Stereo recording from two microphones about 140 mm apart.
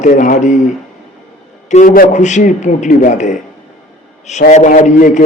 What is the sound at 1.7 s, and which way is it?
A man's voice, 65° left (ahead or behind).